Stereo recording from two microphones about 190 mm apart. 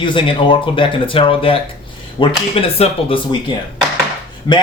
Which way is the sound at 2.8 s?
30° left (ahead or behind).